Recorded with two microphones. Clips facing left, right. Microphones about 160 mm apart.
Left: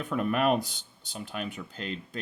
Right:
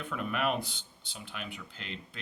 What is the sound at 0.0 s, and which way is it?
Speech, 45° left (ahead or behind).